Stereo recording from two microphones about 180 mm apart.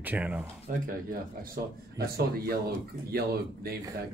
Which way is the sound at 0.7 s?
50° right (ahead or behind).